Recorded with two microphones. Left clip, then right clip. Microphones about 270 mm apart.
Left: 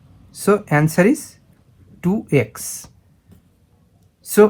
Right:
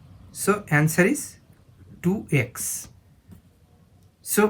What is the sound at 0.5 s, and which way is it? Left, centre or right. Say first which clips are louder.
Speech: left 6 dB; centre.